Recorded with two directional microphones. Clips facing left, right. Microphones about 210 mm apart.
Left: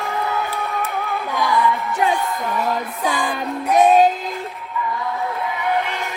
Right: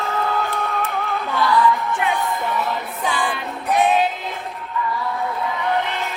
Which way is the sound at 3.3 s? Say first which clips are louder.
Left 3 dB; 45° left (ahead or behind).